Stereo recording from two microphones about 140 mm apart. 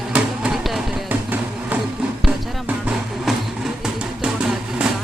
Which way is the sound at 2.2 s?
5° right (ahead or behind).